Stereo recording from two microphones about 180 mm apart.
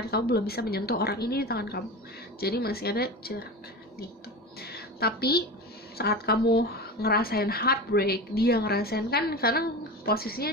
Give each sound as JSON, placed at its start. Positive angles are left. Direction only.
{"t": 0.1, "sound": "speech", "side_deg": 60}
{"t": 4.6, "sound": "a sound", "side_deg": 60}
{"t": 5.9, "sound": "speech", "side_deg": 60}